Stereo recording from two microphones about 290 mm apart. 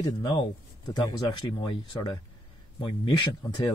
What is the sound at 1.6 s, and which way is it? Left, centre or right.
Speech, centre.